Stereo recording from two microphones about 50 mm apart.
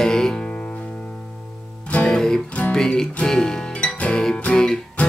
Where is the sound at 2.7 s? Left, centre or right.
Centre.